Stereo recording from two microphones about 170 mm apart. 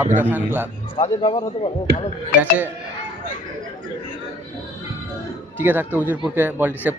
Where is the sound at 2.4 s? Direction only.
10° right (ahead or behind).